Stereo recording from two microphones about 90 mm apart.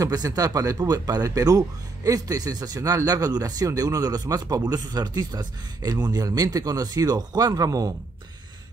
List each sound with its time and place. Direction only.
0.0 s speech: 40° right (ahead or behind)